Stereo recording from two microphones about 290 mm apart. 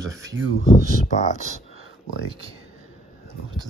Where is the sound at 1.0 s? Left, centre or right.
Left.